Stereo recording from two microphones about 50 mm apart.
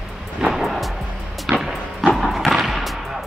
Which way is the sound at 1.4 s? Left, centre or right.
Centre.